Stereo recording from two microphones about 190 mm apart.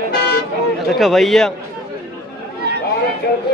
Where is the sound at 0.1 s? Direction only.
55° left (ahead or behind).